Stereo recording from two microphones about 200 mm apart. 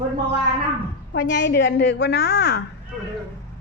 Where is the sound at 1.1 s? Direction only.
65° left (ahead or behind).